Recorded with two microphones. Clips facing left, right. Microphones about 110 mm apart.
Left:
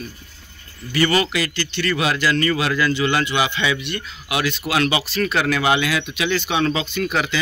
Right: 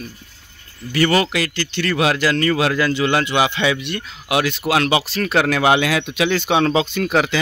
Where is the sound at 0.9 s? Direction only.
65° right (ahead or behind); by 6.9 s 85° right.